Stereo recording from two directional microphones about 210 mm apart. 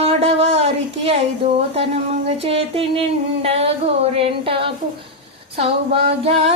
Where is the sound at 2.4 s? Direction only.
25° right (ahead or behind).